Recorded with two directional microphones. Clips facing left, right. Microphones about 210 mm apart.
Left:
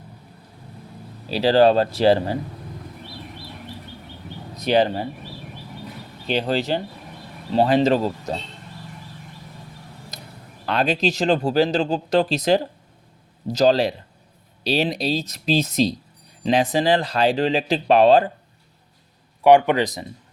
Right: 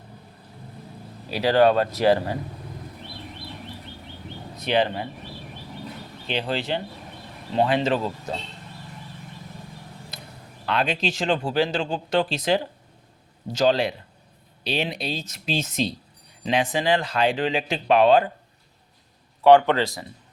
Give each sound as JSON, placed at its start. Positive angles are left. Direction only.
{"t": 1.3, "sound": "speech", "side_deg": 30}
{"t": 4.5, "sound": "speech", "side_deg": 40}
{"t": 6.2, "sound": "speech", "side_deg": 40}
{"t": 10.1, "sound": "a sound", "side_deg": 40}
{"t": 10.7, "sound": "speech", "side_deg": 40}
{"t": 19.4, "sound": "speech", "side_deg": 15}